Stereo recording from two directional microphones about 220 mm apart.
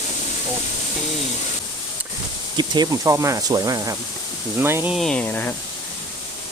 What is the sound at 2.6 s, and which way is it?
Speech, 20° right (ahead or behind).